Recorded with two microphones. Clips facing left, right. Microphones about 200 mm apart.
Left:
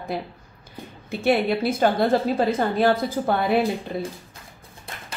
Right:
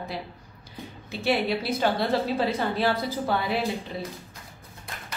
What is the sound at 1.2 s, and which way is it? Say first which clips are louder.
A woman's voice: left 5 dB; 50° left (ahead or behind).